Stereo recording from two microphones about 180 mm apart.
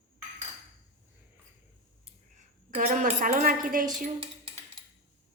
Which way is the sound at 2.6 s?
45° right (ahead or behind).